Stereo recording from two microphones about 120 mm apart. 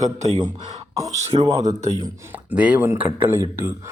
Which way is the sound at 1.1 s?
70° right (ahead or behind).